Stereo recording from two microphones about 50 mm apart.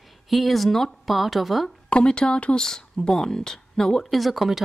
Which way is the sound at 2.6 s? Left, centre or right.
Centre.